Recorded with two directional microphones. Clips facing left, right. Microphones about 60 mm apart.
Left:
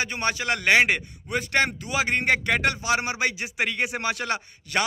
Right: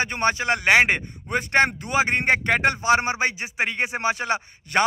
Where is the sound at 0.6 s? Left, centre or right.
Centre.